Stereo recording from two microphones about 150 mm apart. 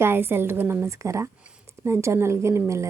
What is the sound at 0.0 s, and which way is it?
A woman's voice, 15° right (ahead or behind).